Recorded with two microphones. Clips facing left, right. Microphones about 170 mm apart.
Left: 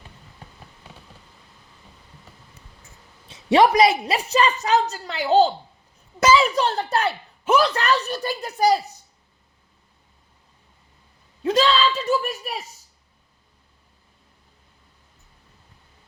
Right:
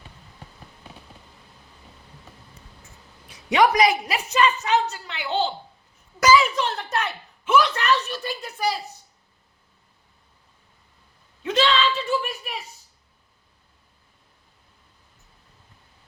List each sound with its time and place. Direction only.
3.2 s a woman's voice: 25° left (ahead or behind)
6.1 s a woman's voice: 25° left (ahead or behind)
11.4 s a sound: 35° left (ahead or behind)